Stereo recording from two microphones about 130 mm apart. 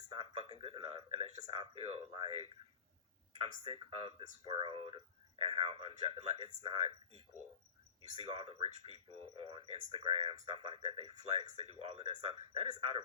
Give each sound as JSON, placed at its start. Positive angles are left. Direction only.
{"t": 0.1, "sound": "speech", "side_deg": -40}
{"t": 8.2, "sound": "speech", "side_deg": -45}